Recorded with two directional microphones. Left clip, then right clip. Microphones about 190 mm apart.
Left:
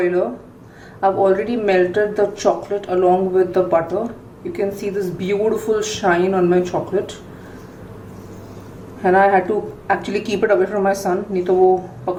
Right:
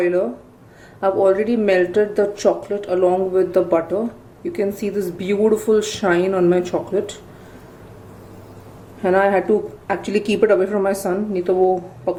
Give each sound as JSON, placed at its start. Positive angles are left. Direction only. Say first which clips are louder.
{"t": 1.0, "sound": "speech", "louder": "even", "side_deg": -45}
{"t": 9.0, "sound": "speech", "louder": "left 3 dB", "side_deg": -45}